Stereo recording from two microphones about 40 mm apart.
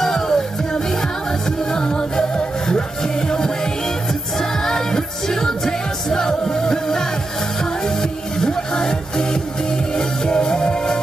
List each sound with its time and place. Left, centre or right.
0.0 s music: centre
1.7 s music: centre